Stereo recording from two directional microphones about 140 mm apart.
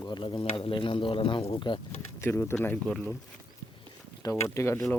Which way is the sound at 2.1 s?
15° left (ahead or behind).